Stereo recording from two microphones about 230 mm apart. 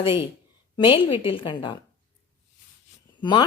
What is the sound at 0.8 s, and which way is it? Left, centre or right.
A woman's voice, left.